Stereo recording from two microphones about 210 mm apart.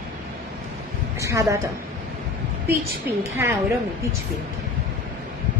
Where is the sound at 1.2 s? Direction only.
15° right (ahead or behind).